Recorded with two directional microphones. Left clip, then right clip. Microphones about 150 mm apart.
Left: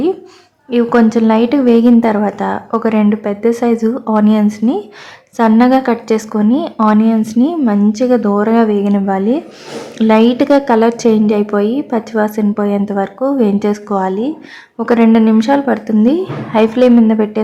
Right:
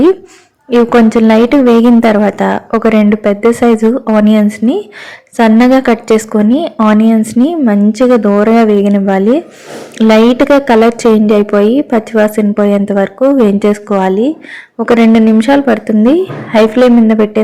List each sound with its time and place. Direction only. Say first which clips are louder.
0.7 s a woman's voice: right 4 dB; 25° right (ahead or behind)